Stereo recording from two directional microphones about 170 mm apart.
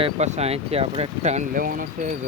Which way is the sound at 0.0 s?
40° right (ahead or behind).